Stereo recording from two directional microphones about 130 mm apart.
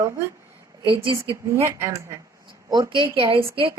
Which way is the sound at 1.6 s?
25° right (ahead or behind).